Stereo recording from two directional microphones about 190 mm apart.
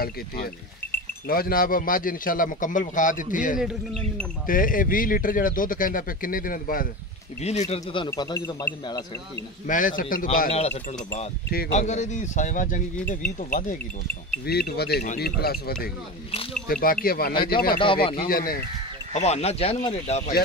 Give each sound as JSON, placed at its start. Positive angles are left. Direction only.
{"t": 1.2, "sound": "a man's voice", "side_deg": 50}
{"t": 3.5, "sound": "speech", "side_deg": 0}
{"t": 4.5, "sound": "a man's voice", "side_deg": 45}
{"t": 7.4, "sound": "a man's voice", "side_deg": 35}
{"t": 8.1, "sound": "speech", "side_deg": 15}
{"t": 9.7, "sound": "a man's voice", "side_deg": 45}
{"t": 10.5, "sound": "a man's voice", "side_deg": 35}
{"t": 14.4, "sound": "a man's voice", "side_deg": 55}
{"t": 17.3, "sound": "speech", "side_deg": 25}
{"t": 18.2, "sound": "a man's voice", "side_deg": 50}
{"t": 19.1, "sound": "a man's voice", "side_deg": 35}